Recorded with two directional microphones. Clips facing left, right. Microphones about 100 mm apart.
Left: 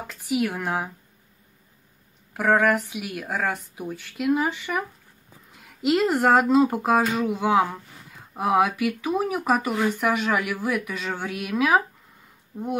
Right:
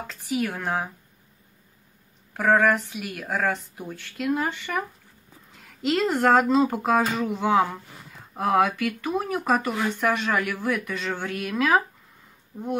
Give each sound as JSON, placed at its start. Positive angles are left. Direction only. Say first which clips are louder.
{"t": 0.0, "sound": "speech", "louder": "left 2 dB", "side_deg": 5}
{"t": 2.3, "sound": "speech", "louder": "even", "side_deg": 5}
{"t": 12.5, "sound": "speech", "louder": "left 2 dB", "side_deg": -10}